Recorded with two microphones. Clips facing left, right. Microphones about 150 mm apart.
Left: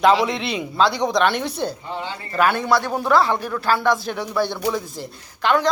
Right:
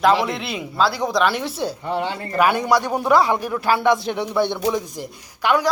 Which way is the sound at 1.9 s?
60° right (ahead or behind).